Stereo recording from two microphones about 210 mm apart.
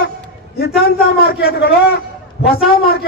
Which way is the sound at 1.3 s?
50° left (ahead or behind).